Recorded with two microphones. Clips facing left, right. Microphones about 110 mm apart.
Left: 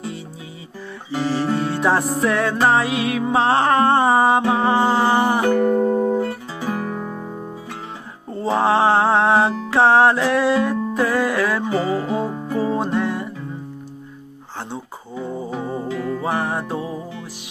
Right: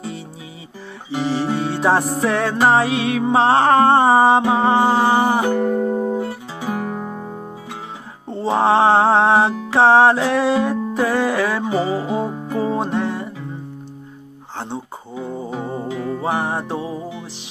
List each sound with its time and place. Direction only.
1.1 s music: 20° right (ahead or behind)
8.3 s music: 25° right (ahead or behind)
14.7 s music: 20° right (ahead or behind)